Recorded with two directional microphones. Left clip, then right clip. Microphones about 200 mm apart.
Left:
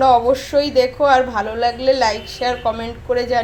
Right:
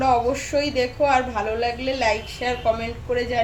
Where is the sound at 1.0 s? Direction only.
25° left (ahead or behind).